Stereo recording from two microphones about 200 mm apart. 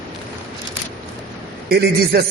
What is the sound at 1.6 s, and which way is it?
Speech, 50° right (ahead or behind).